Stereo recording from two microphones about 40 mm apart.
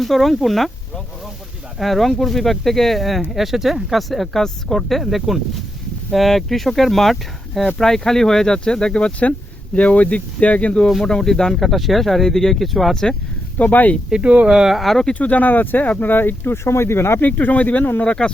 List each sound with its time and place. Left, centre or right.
0.0 s speech: centre; by 10.8 s left
11.0 s speech: centre
11.5 s speech: centre
13.6 s speech: left
14.1 s speech: right
14.4 s speech: centre
14.8 s speech: centre
15.0 s speech: left
17.2 s speech: left
18.0 s speech: left